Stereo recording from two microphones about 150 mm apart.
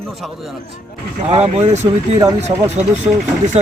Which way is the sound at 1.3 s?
45° right (ahead or behind).